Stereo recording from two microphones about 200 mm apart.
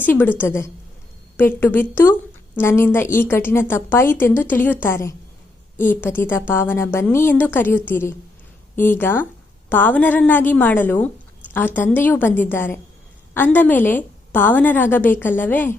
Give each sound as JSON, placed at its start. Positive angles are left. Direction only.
{"t": 0.0, "sound": "a woman's voice", "side_deg": 10}